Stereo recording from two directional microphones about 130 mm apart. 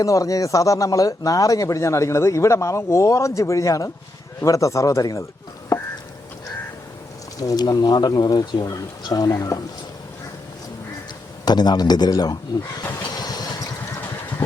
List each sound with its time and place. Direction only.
0.0 s speech: 25° left (ahead or behind)
7.3 s speech: 30° left (ahead or behind)
11.4 s speech: 30° left (ahead or behind)
13.1 s vehicle: 30° left (ahead or behind)